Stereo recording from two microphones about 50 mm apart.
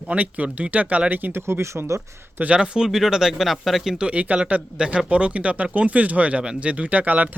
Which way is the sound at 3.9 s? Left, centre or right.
Right.